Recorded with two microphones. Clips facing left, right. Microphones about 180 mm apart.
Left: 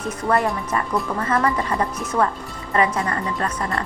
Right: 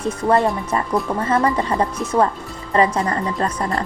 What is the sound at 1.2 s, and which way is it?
A woman's voice, 30° right (ahead or behind).